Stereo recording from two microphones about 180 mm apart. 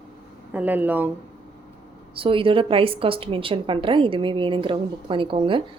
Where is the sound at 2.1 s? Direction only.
30° right (ahead or behind).